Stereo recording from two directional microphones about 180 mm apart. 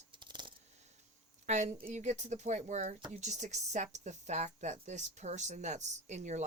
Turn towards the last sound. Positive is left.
turn(degrees=-40)  # may be behind; listen again after turning